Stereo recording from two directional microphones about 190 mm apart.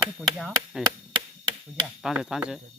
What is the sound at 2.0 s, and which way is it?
Speech, centre (ahead or behind).